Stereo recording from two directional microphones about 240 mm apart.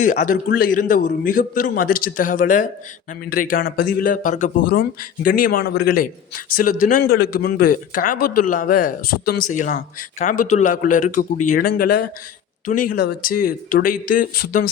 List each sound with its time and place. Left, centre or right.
0.0 s a man's voice: left